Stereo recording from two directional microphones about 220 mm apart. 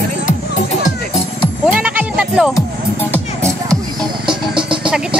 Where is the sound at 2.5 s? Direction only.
10° left (ahead or behind).